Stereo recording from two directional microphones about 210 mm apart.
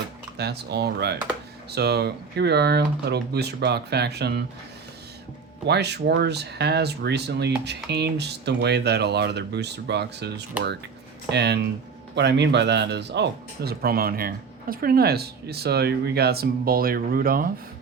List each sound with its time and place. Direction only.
0.3 s speech: 50° right (ahead or behind)
5.6 s speech: 55° right (ahead or behind)